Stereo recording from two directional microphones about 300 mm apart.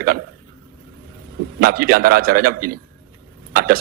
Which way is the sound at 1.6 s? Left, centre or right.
Right.